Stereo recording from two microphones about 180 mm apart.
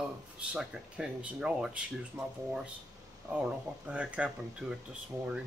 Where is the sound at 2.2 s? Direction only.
15° right (ahead or behind).